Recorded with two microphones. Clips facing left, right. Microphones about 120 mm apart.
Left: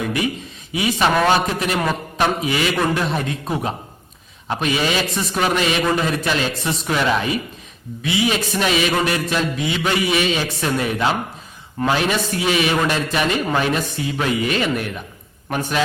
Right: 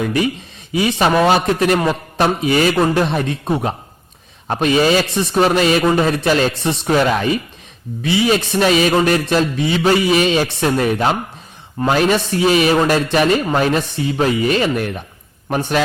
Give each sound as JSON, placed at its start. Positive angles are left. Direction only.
{"t": 0.0, "sound": "a man's voice", "side_deg": -35}